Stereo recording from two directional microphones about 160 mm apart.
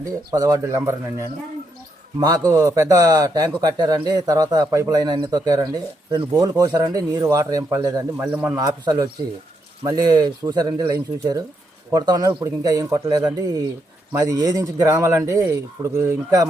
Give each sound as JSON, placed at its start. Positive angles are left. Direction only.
{"t": 0.0, "sound": "a man's voice", "side_deg": -20}
{"t": 8.3, "sound": "a man's voice", "side_deg": -10}
{"t": 8.5, "sound": "a man's voice", "side_deg": -25}